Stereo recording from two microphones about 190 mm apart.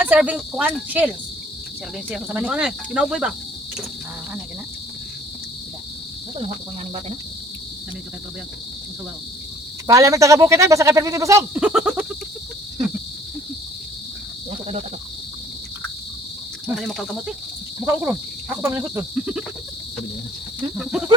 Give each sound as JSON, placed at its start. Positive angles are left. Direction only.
{"t": 0.0, "sound": "speech", "side_deg": -10}
{"t": 2.0, "sound": "cricket", "side_deg": -5}
{"t": 9.8, "sound": "speech", "side_deg": -15}
{"t": 16.8, "sound": "cricket", "side_deg": -5}
{"t": 17.7, "sound": "speech", "side_deg": -10}